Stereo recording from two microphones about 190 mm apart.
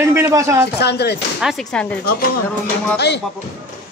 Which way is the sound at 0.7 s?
60° left (ahead or behind).